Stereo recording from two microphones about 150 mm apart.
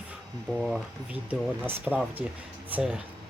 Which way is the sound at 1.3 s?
10° right (ahead or behind).